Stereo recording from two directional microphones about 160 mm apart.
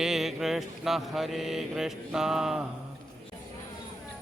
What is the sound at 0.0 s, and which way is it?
Mantra, centre (ahead or behind).